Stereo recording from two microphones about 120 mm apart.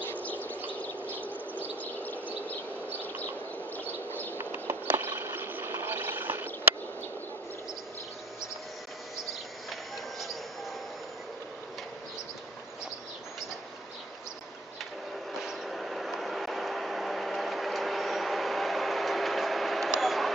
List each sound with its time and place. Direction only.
0.2 s bird: 15° left (ahead or behind)
1.1 s bird: 15° right (ahead or behind)
1.6 s bird: 15° left (ahead or behind)
4.4 s a sound: 20° right (ahead or behind)
9.7 s a sound: centre (ahead or behind)
15.4 s vehicle: centre (ahead or behind)